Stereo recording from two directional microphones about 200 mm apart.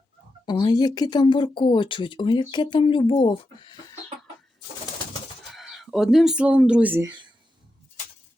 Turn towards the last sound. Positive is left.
turn(degrees=-10)  # may be behind; listen again after turning